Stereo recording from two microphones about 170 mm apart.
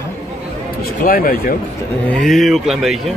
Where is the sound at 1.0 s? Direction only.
55° left (ahead or behind).